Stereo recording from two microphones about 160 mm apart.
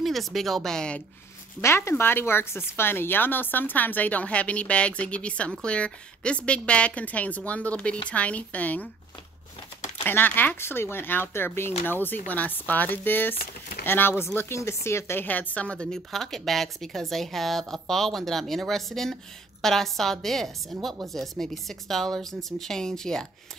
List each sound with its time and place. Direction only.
0.0 s speech: centre (ahead or behind)
1.6 s speech: 15° left (ahead or behind)
10.0 s speech: 10° left (ahead or behind)
13.4 s speech: 70° left (ahead or behind)
13.8 s speech: 15° left (ahead or behind)